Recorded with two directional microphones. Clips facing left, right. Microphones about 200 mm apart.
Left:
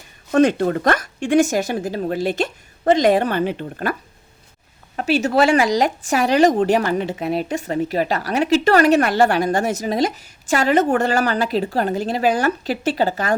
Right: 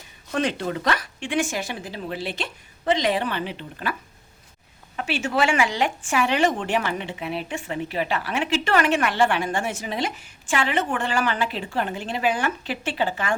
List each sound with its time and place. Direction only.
0.3 s speech: 45° left (ahead or behind)
4.9 s speech: 40° left (ahead or behind)